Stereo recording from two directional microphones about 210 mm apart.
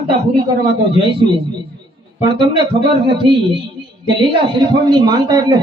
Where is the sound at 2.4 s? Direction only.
25° right (ahead or behind).